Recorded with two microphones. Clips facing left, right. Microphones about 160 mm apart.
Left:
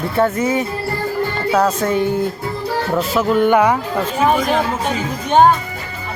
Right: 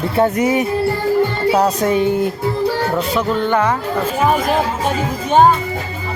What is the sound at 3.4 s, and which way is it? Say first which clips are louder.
Speech: left 6 dB; 10° left (ahead or behind).